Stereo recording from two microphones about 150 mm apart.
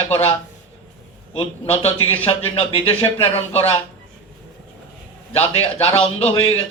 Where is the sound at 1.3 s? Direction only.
40° left (ahead or behind).